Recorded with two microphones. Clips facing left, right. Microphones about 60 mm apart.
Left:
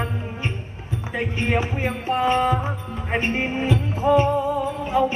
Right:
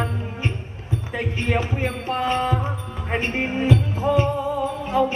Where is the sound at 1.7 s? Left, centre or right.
Centre.